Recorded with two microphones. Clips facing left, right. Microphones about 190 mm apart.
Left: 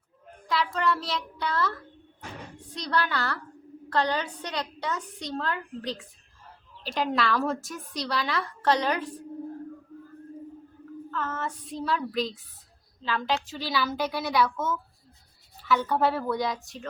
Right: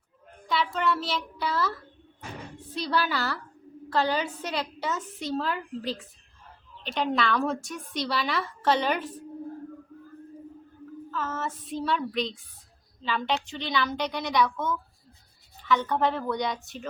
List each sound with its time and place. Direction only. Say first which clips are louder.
0.4 s a child's voice: even; centre (ahead or behind)
2.7 s a woman's voice: right 1 dB; 5° right (ahead or behind)
11.1 s a woman's voice: even; 5° right (ahead or behind)